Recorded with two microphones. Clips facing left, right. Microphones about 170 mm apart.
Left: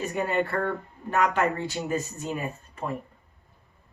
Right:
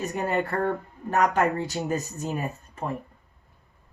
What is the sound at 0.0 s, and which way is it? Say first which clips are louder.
Speech: even; 40° right (ahead or behind).